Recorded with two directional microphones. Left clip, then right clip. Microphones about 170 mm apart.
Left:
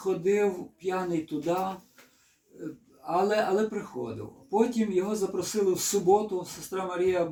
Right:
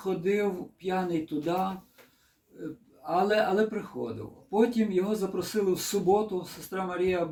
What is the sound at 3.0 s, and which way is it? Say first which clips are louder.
Speech: even; 10° right (ahead or behind).